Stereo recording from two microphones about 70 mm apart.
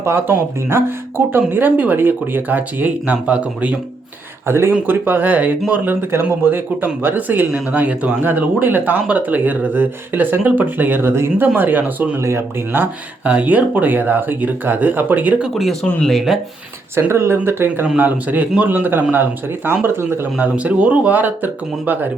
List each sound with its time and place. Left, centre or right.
0.0 s speech: right; by 3.8 s centre
4.4 s speech: right
11.1 s speech: right
11.4 s speech: right
15.5 s speech: centre
16.9 s speech: right
17.8 s speech: right
20.4 s speech: right